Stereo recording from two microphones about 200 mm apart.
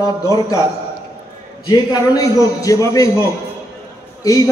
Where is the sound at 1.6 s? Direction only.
15° left (ahead or behind).